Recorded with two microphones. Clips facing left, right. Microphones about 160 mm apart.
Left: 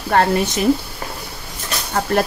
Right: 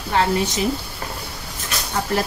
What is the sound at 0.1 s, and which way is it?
Speech, 55° left (ahead or behind).